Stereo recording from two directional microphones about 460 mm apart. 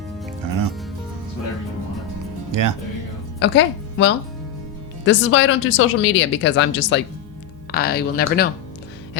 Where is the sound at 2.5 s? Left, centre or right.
Right.